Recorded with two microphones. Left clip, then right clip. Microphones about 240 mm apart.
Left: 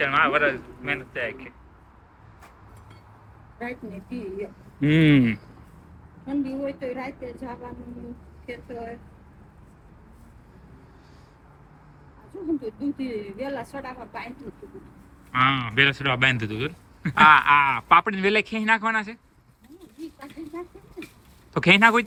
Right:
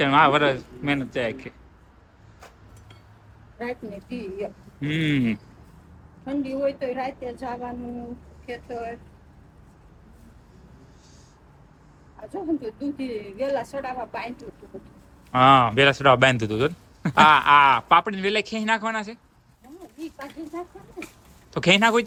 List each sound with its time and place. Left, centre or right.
0.1 s a man's voice: right
4.8 s speech: centre
6.2 s a woman's voice: centre
12.5 s a woman's voice: centre
15.3 s a woman's voice: centre